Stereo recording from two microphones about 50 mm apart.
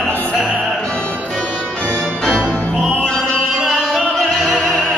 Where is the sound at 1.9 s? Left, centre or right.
Left.